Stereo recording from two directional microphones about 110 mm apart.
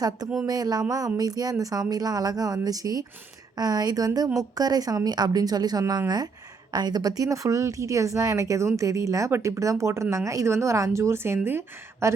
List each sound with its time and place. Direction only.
0.4 s speech: 35° right (ahead or behind)